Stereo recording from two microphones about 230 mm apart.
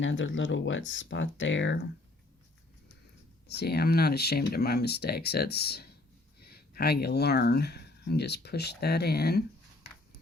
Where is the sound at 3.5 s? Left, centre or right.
Left.